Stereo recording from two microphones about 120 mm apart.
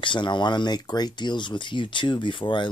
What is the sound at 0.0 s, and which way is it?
Speech, 40° left (ahead or behind).